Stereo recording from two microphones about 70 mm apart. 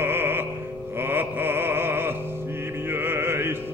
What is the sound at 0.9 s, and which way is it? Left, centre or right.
Music, right.